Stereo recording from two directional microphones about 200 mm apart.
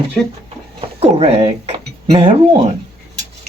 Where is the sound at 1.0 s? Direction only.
30° right (ahead or behind).